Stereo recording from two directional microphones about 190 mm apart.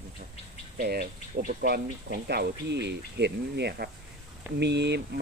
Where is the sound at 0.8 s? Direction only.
55° right (ahead or behind).